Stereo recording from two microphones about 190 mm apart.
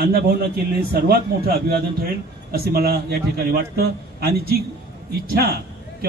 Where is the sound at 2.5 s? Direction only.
55° right (ahead or behind).